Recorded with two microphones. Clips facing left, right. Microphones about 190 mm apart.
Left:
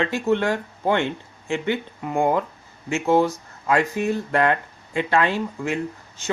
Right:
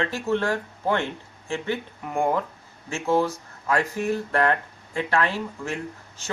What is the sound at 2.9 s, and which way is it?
Speech, 20° left (ahead or behind).